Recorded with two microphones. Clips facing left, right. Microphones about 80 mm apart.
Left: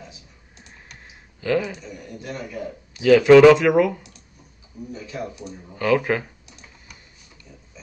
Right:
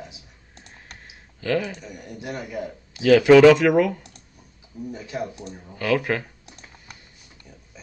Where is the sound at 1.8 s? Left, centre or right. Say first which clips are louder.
Even; centre.